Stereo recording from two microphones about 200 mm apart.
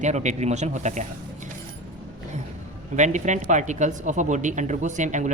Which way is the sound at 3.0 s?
35° right (ahead or behind).